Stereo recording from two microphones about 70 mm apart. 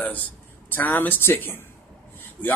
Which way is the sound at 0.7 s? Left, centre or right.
Left.